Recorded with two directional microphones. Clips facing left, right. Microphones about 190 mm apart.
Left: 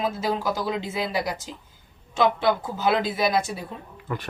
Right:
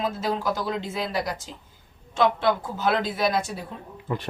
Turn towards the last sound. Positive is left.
turn(degrees=-25)  # may be behind; listen again after turning